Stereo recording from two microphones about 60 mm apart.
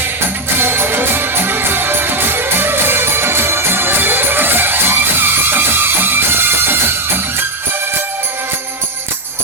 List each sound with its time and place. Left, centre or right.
0.6 s music: right